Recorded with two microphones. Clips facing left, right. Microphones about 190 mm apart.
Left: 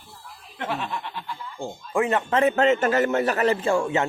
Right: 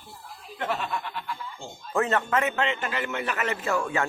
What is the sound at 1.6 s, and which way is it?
Speech, 55° left (ahead or behind).